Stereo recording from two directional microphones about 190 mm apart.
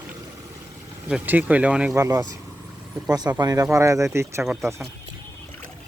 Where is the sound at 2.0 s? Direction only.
15° right (ahead or behind).